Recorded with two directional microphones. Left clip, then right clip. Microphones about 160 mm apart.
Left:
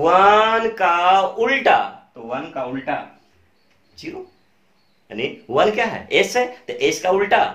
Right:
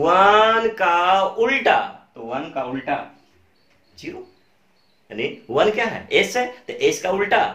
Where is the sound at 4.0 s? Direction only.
20° left (ahead or behind).